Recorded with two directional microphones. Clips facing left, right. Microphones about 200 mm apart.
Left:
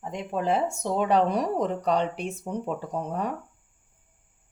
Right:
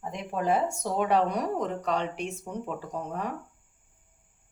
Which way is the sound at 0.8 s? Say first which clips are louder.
Left 2 dB; 30° left (ahead or behind).